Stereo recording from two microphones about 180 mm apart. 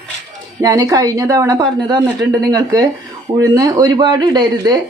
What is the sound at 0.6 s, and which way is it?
A woman's voice, 20° right (ahead or behind).